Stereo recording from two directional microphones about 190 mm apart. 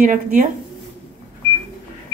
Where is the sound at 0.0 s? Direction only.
45° right (ahead or behind).